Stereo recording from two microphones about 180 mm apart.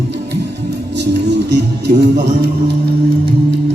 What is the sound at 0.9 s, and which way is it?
Music, 70° right (ahead or behind).